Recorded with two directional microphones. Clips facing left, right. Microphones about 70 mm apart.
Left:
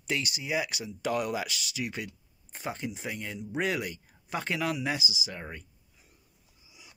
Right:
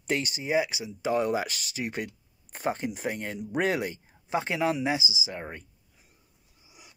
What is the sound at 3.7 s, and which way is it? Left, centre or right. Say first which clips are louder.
Speech: right 3 dB; right.